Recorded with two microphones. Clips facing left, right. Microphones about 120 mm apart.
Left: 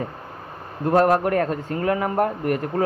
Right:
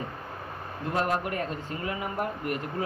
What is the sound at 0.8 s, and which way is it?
Speech, 50° left (ahead or behind).